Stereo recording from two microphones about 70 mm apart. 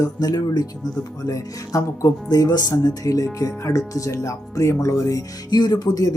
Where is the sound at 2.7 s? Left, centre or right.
Left.